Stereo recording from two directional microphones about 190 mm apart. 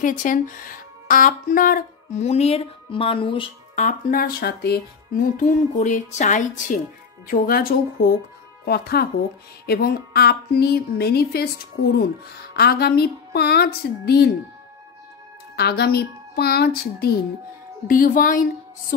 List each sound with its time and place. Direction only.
0.0 s speech: 45° left (ahead or behind); by 3.4 s 25° left (ahead or behind)
3.7 s music: 45° left (ahead or behind)
8.6 s a woman's voice: 55° left (ahead or behind)
15.5 s a woman's voice: 55° left (ahead or behind)
17.8 s music: 45° left (ahead or behind)